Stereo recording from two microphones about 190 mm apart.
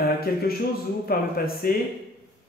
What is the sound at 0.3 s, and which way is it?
A man's voice, 55° left (ahead or behind).